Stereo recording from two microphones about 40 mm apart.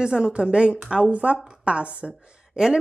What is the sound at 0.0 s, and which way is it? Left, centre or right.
Speech, right.